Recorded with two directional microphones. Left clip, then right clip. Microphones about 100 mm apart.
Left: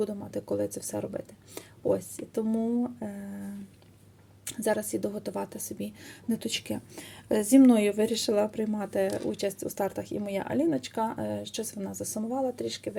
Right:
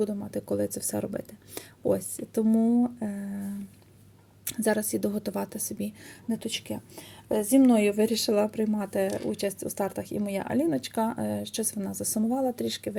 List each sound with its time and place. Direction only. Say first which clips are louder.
0.0 s speech: right 2 dB; 20° right (ahead or behind)
6.2 s a woman's voice: left 1 dB; centre (ahead or behind)
7.8 s speech: right 2 dB; 15° right (ahead or behind); by 13.0 s 35° right (ahead or behind)